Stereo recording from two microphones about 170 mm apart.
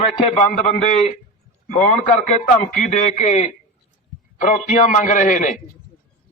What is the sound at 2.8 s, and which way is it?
A man's voice, 45° left (ahead or behind).